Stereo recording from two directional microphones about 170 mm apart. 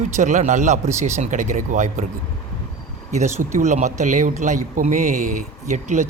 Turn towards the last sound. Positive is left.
turn(degrees=-45)  # may be behind; listen again after turning